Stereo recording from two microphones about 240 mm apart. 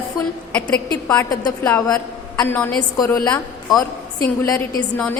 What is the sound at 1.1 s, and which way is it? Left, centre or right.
A woman's voice, centre.